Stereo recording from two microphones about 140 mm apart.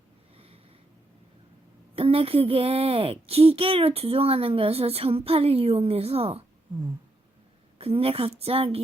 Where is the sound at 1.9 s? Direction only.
40° right (ahead or behind).